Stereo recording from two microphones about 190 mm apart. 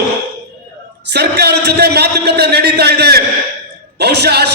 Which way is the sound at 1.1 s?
60° right (ahead or behind).